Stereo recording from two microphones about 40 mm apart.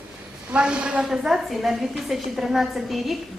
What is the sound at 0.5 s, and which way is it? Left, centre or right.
Speech, right.